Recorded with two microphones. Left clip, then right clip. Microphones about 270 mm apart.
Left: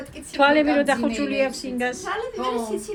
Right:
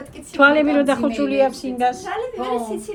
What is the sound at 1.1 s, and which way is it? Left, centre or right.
Speech, right.